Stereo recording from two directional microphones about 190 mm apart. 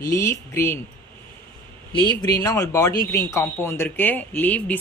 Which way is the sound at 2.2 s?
15° left (ahead or behind).